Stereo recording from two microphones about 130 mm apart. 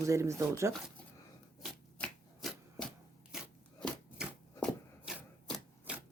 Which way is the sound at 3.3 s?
5° right (ahead or behind).